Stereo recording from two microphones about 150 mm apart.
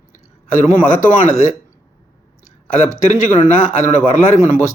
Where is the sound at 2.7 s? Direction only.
50° left (ahead or behind).